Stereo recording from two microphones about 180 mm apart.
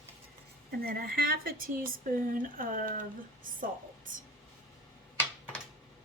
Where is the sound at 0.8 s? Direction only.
55° right (ahead or behind).